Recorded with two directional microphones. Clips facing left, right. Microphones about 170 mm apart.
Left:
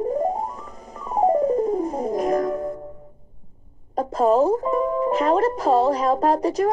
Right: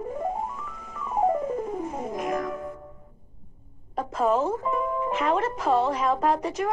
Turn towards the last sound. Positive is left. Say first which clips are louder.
# left 5 dB
turn(degrees=35)  # may be behind; listen again after turning